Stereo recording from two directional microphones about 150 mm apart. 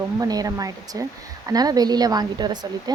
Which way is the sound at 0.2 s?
25° right (ahead or behind).